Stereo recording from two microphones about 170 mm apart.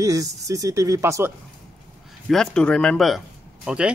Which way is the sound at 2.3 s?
5° left (ahead or behind).